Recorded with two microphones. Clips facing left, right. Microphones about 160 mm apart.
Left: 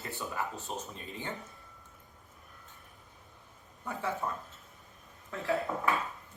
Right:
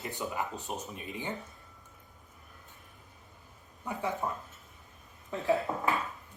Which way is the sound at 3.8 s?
15° right (ahead or behind).